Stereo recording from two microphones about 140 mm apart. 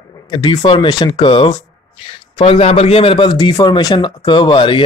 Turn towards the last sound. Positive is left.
turn(degrees=35)  # may be behind; listen again after turning